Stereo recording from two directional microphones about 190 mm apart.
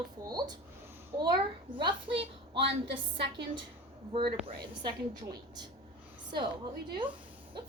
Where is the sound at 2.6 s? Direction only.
65° right (ahead or behind).